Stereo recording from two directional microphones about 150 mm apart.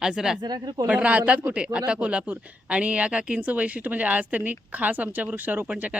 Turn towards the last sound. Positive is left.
turn(degrees=-10)  # may be behind; listen again after turning